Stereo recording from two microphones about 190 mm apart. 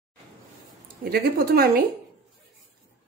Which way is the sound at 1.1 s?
55° right (ahead or behind).